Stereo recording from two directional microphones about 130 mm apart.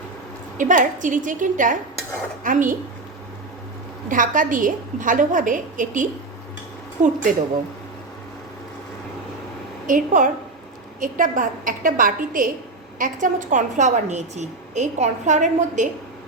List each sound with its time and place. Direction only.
0.5 s a woman's voice: 85° right
4.1 s a woman's voice: 90° right; by 7.3 s 75° right (ahead or behind)
9.8 s a woman's voice: 80° right
13.0 s a woman's voice: 80° right